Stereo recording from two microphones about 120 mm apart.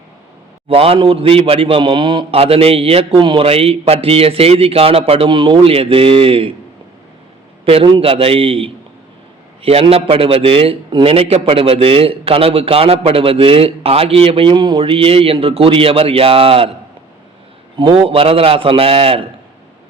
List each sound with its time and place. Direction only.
0.7 s a man's voice: 50° right (ahead or behind)
7.6 s a man's voice: 50° right (ahead or behind)
17.7 s a man's voice: 45° right (ahead or behind)